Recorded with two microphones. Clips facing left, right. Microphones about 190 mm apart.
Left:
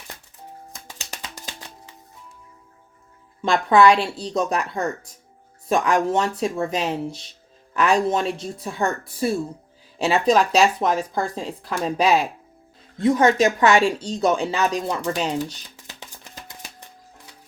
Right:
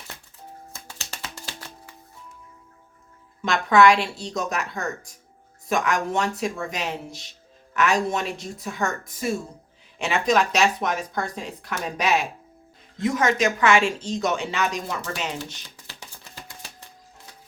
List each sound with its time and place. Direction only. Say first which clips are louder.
0.7 s music: left 1 dB; 15° left (ahead or behind)
3.4 s speech: left 2 dB; 30° left (ahead or behind)
15.9 s music: left 3 dB; 20° left (ahead or behind)